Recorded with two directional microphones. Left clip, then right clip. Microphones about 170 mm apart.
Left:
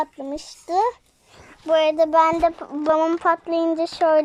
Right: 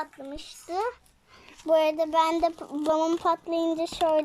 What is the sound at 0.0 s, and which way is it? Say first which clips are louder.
Speech: left 9 dB; 10° left (ahead or behind).